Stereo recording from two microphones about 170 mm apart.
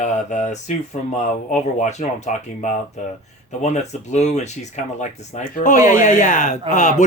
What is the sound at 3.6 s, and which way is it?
A man's voice, 40° left (ahead or behind).